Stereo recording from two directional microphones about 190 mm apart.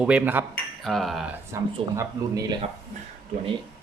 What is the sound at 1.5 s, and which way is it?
Speech, 15° right (ahead or behind).